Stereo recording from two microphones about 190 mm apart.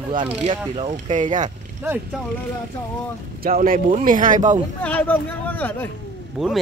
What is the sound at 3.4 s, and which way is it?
Speech, 50° right (ahead or behind).